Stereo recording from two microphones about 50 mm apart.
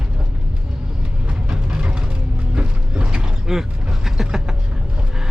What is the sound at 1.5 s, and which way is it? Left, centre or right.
Mechanisms, centre.